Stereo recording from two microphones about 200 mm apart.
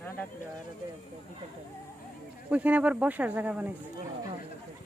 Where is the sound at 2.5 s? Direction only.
5° right (ahead or behind).